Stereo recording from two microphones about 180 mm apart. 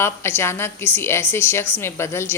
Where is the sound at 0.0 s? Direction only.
15° left (ahead or behind).